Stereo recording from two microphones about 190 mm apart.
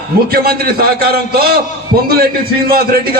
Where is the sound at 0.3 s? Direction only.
50° right (ahead or behind).